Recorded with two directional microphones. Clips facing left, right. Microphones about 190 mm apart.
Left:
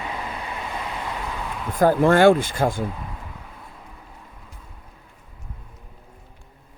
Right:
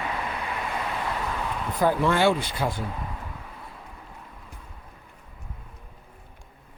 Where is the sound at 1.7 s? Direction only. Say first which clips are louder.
Left 6 dB; 45° left (ahead or behind).